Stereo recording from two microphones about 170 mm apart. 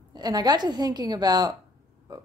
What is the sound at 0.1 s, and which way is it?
Speech, 25° right (ahead or behind).